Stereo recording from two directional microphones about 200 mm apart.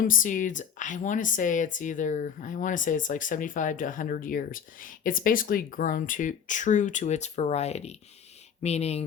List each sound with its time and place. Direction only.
0.0 s speech: 40° left (ahead or behind)